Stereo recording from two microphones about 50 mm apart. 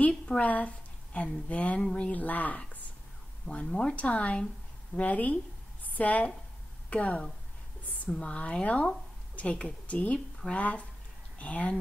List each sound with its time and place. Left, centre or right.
0.4 s a woman's voice: left
2.1 s speech: left
10.1 s speech: centre
11.3 s speech: left